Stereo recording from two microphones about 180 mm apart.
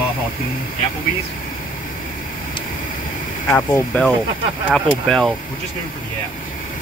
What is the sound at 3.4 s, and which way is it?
Speech, 15° left (ahead or behind).